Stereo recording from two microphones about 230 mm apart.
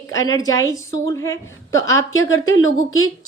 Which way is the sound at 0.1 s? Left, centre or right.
Centre.